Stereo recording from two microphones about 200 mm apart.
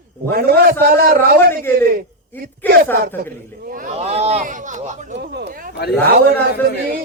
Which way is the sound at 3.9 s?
30° right (ahead or behind).